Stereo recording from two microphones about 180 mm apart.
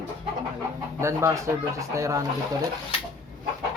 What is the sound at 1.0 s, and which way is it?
Speech, 15° right (ahead or behind).